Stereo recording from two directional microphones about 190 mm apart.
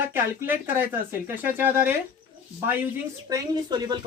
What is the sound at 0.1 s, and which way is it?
Speech, 10° right (ahead or behind).